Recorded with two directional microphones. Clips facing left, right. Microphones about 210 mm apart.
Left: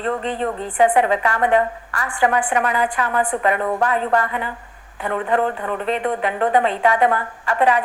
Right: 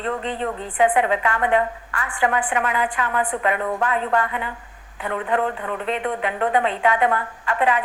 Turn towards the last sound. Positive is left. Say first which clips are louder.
# left 3 dB
turn(degrees=40)  # may be behind; listen again after turning